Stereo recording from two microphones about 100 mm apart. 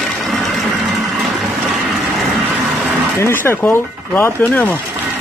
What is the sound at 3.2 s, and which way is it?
Speech, 25° left (ahead or behind).